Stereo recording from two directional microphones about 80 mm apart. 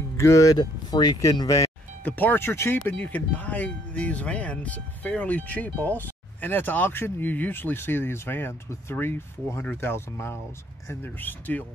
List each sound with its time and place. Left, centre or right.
0.2 s speech: left
0.6 s speech: left
2.0 s speech: left